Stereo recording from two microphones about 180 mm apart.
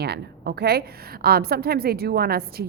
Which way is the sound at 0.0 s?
65° right (ahead or behind).